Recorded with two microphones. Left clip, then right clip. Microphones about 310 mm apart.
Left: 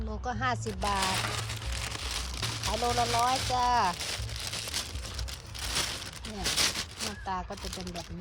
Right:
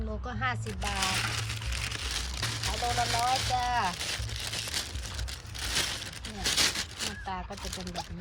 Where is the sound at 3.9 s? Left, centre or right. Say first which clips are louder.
Even; left.